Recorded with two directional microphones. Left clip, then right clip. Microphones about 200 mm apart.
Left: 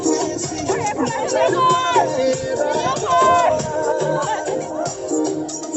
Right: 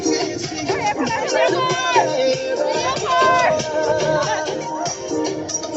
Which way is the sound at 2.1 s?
35° left (ahead or behind).